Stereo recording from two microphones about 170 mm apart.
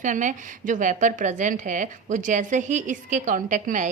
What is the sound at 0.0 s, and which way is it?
A woman's voice, 50° right (ahead or behind).